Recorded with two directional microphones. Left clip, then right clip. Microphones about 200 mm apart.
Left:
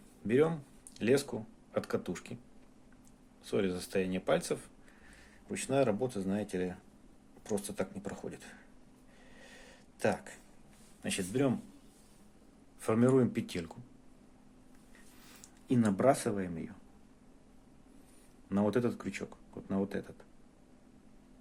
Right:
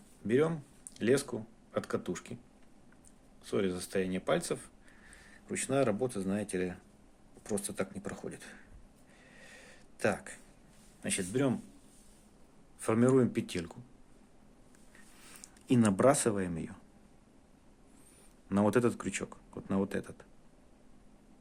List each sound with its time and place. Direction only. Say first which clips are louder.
0.3 s speech: left 1 dB; centre (ahead or behind)
3.4 s speech: even; 5° right (ahead or behind)
9.4 s a sound: right 1 dB; 10° right (ahead or behind)
11.0 s speech: even; 10° right (ahead or behind)
12.8 s speech: right 1 dB; 10° right (ahead or behind)
15.2 s speech: right 4 dB; 15° right (ahead or behind)
18.4 s speech: right 3 dB; 20° right (ahead or behind)